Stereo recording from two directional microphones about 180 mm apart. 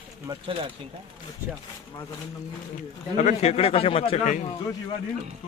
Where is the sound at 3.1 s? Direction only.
40° left (ahead or behind).